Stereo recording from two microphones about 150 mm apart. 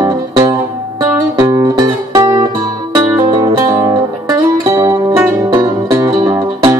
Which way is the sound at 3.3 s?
25° right (ahead or behind).